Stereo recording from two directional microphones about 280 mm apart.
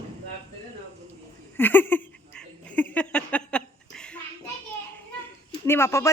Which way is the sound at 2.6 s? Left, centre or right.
Centre.